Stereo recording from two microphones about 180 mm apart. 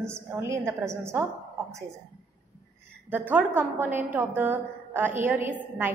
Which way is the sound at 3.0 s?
10° right (ahead or behind).